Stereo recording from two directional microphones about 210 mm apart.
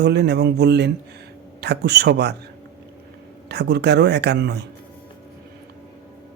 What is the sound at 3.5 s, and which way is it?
Speech, 55° right (ahead or behind).